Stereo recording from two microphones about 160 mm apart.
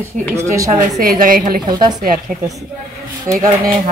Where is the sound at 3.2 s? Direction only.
20° right (ahead or behind).